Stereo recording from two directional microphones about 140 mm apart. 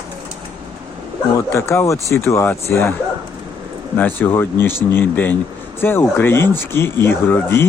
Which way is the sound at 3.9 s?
15° left (ahead or behind).